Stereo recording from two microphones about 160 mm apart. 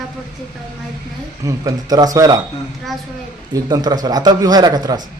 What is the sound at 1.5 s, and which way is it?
Speech, 20° right (ahead or behind).